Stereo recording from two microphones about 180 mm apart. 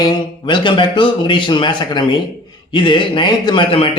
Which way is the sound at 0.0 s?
25° left (ahead or behind).